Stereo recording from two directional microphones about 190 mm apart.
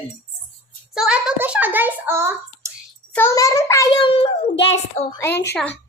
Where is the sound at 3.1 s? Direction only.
15° left (ahead or behind).